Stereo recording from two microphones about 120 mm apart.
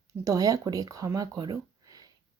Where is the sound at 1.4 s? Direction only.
30° right (ahead or behind).